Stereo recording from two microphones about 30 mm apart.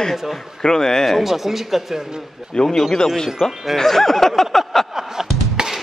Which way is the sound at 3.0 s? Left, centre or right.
Centre.